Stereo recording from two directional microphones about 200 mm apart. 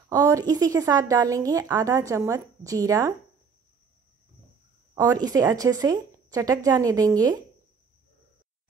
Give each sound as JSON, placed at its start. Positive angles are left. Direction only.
{"t": 0.1, "sound": "a woman's voice", "side_deg": -15}
{"t": 4.9, "sound": "speech", "side_deg": -20}